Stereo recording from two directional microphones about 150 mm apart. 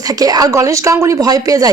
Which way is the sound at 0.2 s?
25° right (ahead or behind).